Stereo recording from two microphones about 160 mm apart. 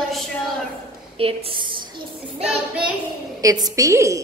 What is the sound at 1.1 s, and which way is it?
Speech, 35° right (ahead or behind).